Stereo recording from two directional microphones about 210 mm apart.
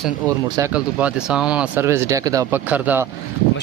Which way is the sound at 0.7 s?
5° right (ahead or behind).